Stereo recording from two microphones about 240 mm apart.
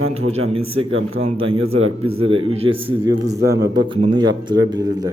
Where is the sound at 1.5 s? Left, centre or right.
Right.